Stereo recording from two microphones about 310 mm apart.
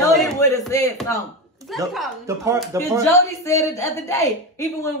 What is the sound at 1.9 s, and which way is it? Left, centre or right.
Speech, centre.